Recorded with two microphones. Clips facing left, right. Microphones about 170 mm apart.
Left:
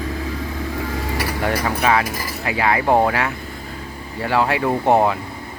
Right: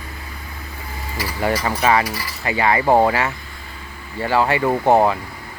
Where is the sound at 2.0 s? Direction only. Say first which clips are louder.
Left 1 dB; 50° left (ahead or behind).